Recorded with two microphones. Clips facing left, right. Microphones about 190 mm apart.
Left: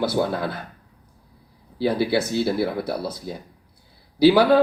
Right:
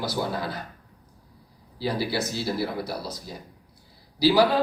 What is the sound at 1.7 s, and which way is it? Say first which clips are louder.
Speech: left 6 dB; 55° left (ahead or behind).